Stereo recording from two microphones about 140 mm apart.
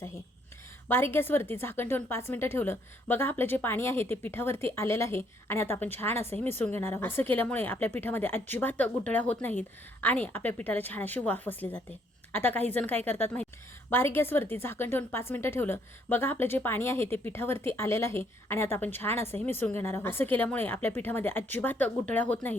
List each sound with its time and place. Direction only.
0.9 s a woman's voice: 15° left (ahead or behind)